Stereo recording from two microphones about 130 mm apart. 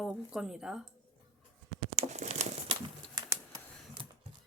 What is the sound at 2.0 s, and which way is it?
Crumpling, 60° right (ahead or behind).